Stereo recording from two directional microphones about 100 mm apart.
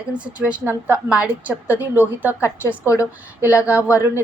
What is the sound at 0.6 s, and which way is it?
A woman's voice, 25° right (ahead or behind).